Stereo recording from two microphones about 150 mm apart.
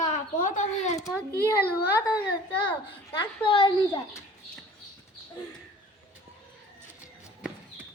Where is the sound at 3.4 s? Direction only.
35° left (ahead or behind).